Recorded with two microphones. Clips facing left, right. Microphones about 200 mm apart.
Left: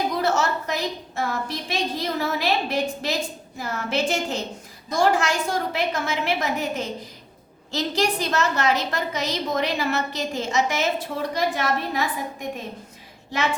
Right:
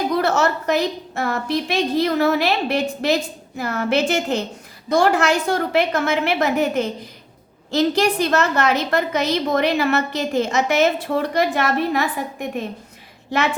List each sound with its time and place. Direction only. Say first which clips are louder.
0.2 s a woman's voice: right 4 dB; 65° right (ahead or behind)